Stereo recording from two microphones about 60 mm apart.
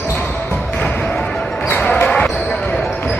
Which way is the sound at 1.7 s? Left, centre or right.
Left.